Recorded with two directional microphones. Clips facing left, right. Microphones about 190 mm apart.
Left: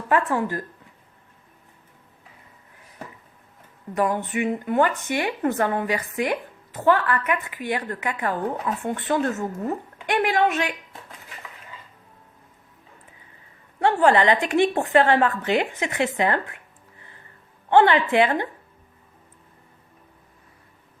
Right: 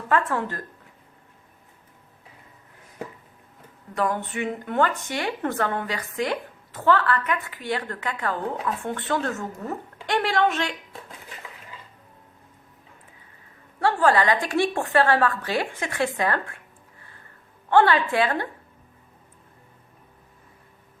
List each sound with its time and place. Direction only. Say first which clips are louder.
0.1 s a woman's voice: left 2 dB; 15° left (ahead or behind)
3.9 s a woman's voice: left 3 dB; 10° left (ahead or behind)
13.8 s a woman's voice: left 2 dB; 20° left (ahead or behind)
17.7 s a woman's voice: left 2 dB; 20° left (ahead or behind)